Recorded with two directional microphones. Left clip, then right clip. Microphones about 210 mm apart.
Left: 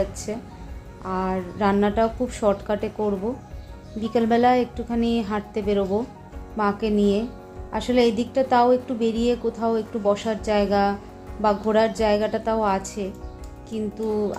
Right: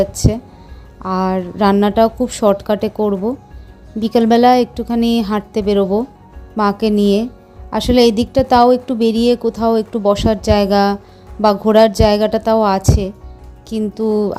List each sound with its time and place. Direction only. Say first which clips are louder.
0.0 s a woman's voice: right 10 dB; 45° right (ahead or behind)